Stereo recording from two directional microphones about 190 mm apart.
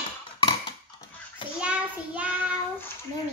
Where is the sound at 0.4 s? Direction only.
30° left (ahead or behind).